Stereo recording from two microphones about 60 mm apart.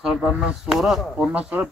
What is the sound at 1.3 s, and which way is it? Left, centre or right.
Speech, right.